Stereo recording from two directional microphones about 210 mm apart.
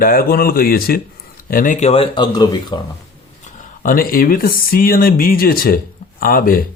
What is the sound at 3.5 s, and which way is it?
Speech, 40° left (ahead or behind).